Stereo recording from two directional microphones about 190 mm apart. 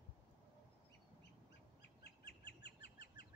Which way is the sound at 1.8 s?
60° left (ahead or behind).